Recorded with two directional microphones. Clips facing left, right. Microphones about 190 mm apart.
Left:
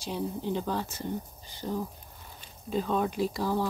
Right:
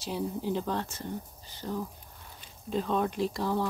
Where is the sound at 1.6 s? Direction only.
15° left (ahead or behind).